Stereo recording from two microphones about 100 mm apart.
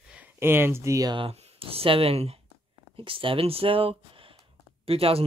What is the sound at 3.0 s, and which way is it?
Speech, 60° right (ahead or behind).